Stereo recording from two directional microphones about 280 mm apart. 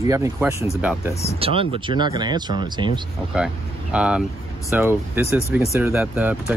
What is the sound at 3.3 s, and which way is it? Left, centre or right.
Speech, centre.